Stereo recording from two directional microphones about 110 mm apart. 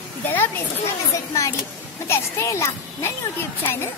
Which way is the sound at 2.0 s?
25° left (ahead or behind).